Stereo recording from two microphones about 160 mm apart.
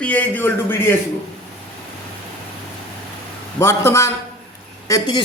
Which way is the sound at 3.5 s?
15° left (ahead or behind).